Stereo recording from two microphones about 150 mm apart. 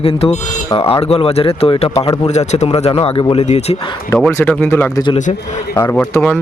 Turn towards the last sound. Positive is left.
turn(degrees=15)  # may be behind; listen again after turning